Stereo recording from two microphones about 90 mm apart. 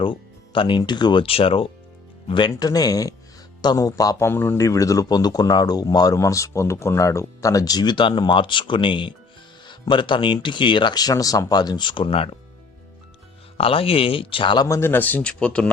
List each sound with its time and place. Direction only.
0.0 s music: 65° left (ahead or behind)
0.8 s speech: 55° left (ahead or behind)
1.2 s speech: 90° left
2.2 s speech: 65° left (ahead or behind)
2.6 s speech: 45° left (ahead or behind)
4.3 s speech: 25° left (ahead or behind)
4.5 s speech: 35° left (ahead or behind); by 12.4 s 90° left
13.6 s speech: 90° left; by 14.6 s 70° left (ahead or behind)
14.8 s a man's voice: 25° left (ahead or behind)